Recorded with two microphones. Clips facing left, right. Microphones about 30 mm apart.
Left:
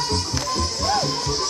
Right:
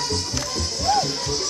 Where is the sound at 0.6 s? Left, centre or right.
Centre.